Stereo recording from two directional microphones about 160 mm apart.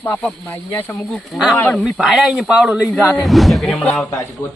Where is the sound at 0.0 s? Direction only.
10° left (ahead or behind).